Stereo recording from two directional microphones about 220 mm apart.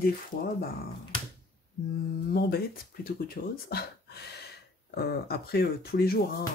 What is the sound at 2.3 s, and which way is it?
Speech, 45° left (ahead or behind).